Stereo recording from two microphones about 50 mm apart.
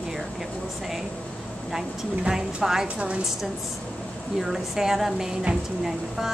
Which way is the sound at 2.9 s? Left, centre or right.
Right.